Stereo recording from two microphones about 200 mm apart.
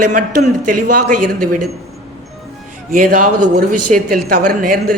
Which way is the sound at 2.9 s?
40° right (ahead or behind).